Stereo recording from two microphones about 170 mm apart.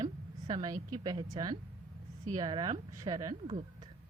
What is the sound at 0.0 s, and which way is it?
A woman's voice, 25° right (ahead or behind).